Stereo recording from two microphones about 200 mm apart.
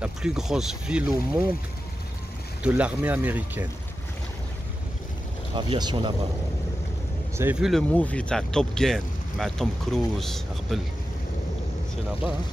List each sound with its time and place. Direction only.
0.0 s speech: 5° right (ahead or behind)
2.6 s speech: 5° right (ahead or behind)
5.6 s speech: 20° right (ahead or behind)
7.3 s speech: 5° right (ahead or behind)
7.9 s speech: 5° left (ahead or behind)